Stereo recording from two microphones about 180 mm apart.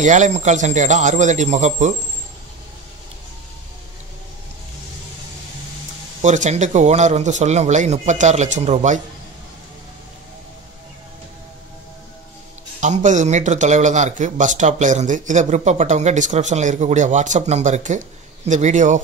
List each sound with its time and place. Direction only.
0.0 s speech: 40° right (ahead or behind)
6.2 s speech: 40° right (ahead or behind)
12.8 s speech: 40° right (ahead or behind)